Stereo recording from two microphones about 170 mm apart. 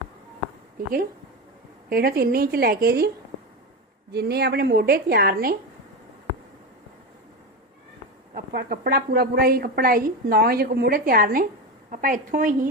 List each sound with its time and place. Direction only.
1.9 s a woman's voice: 65° right (ahead or behind)
4.1 s a woman's voice: 70° right (ahead or behind)
8.5 s a woman's voice: 65° right (ahead or behind)